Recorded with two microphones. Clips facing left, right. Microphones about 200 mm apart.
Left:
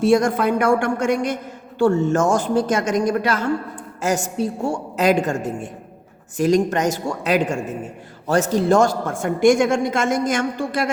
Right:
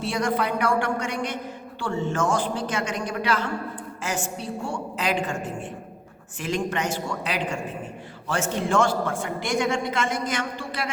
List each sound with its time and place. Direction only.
0.0 s a man's voice: 45° left (ahead or behind)